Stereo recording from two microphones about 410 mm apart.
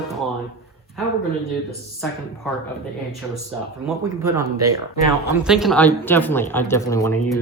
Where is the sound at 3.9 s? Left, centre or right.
Centre.